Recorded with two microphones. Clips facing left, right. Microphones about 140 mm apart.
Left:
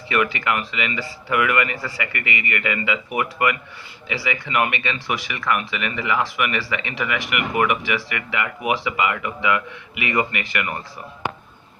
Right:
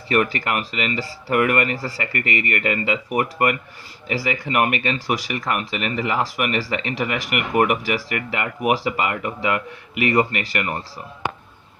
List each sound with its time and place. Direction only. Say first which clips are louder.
0.1 s speech: right 1 dB; 40° right (ahead or behind)